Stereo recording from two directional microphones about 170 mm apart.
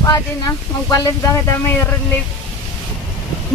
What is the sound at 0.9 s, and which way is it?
Speech, 15° left (ahead or behind).